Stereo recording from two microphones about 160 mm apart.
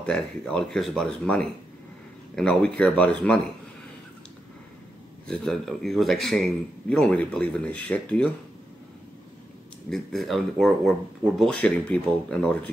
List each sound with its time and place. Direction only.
0.0 s speech: 5° left (ahead or behind)
5.3 s speech: 5° left (ahead or behind)
9.8 s speech: centre (ahead or behind)